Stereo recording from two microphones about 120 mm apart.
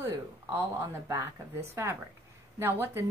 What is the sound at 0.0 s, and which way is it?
Speech, 25° right (ahead or behind).